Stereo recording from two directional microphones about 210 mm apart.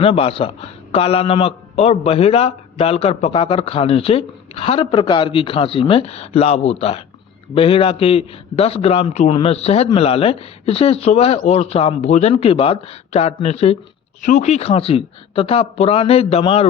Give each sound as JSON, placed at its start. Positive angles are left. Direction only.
{"t": 0.0, "sound": "a man's voice", "side_deg": 25}